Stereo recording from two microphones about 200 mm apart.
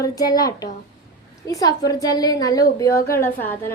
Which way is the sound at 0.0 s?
20° left (ahead or behind).